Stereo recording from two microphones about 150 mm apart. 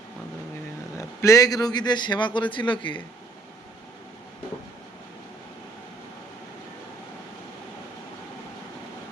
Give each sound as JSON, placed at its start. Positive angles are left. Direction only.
{"t": 0.9, "sound": "a man's voice", "side_deg": 20}